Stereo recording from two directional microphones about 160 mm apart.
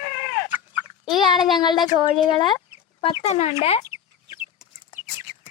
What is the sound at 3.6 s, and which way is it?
Chicken, 40° left (ahead or behind).